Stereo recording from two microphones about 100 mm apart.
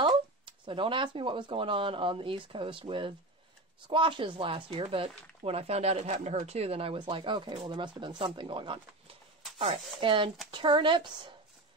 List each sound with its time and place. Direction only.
0.5 s a woman's voice: 60° right (ahead or behind)